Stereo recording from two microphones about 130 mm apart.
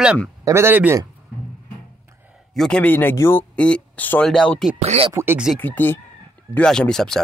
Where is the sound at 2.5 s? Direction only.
5° left (ahead or behind).